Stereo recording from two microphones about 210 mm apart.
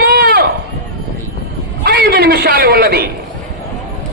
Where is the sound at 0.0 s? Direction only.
45° right (ahead or behind).